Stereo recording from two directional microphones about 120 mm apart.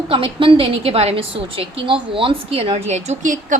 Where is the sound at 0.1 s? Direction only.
45° right (ahead or behind); by 3.3 s 70° right (ahead or behind).